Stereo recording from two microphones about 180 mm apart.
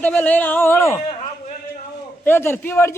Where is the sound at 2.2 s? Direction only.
10° left (ahead or behind).